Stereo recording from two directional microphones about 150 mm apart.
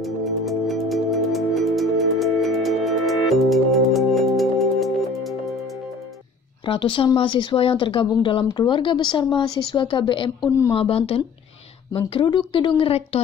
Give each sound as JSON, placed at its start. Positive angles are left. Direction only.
{"t": 0.0, "sound": "music", "side_deg": 0}
{"t": 6.6, "sound": "speech", "side_deg": 35}